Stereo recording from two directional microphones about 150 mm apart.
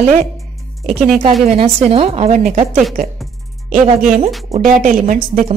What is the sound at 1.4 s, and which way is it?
Speech, 45° right (ahead or behind).